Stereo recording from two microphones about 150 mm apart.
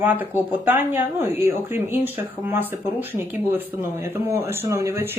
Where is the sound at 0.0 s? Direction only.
10° right (ahead or behind).